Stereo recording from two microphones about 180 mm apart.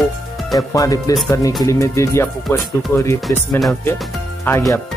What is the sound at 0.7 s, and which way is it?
Speech, 20° left (ahead or behind).